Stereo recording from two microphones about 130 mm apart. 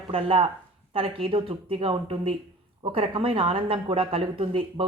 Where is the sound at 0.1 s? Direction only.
45° right (ahead or behind).